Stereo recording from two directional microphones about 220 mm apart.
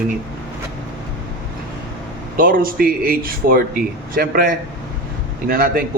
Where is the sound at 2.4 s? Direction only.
40° right (ahead or behind).